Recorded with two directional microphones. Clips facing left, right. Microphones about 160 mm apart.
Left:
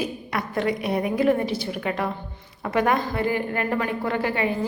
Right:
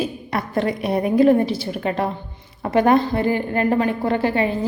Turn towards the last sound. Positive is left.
turn(degrees=-30)  # may be behind; listen again after turning